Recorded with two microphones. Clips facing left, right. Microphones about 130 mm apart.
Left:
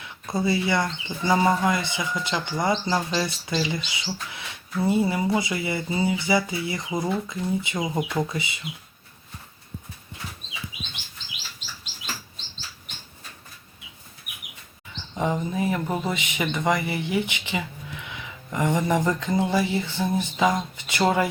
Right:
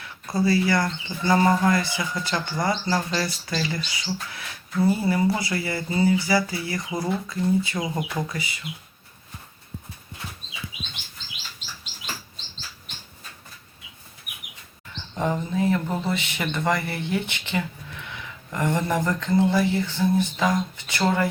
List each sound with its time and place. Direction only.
0.0 s speech: 20° left (ahead or behind)
15.2 s speech: 10° left (ahead or behind)